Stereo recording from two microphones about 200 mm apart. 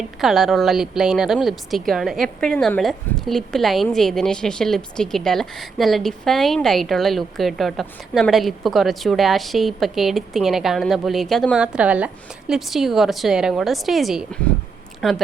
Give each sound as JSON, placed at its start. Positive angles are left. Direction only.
{"t": 0.2, "sound": "a woman's voice", "side_deg": 0}